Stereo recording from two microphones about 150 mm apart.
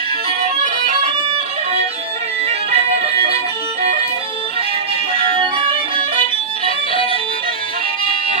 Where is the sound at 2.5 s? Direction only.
40° right (ahead or behind).